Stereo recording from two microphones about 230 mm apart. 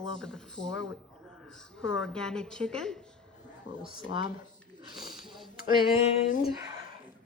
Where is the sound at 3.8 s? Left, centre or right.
Right.